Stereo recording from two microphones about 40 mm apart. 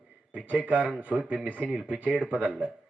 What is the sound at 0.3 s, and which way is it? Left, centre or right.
A man's voice, right.